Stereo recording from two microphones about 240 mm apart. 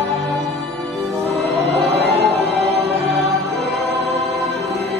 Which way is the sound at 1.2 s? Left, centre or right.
Right.